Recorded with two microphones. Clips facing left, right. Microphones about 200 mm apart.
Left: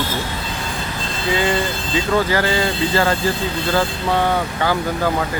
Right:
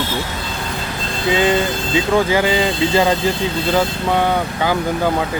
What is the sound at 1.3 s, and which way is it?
Speech, 20° right (ahead or behind).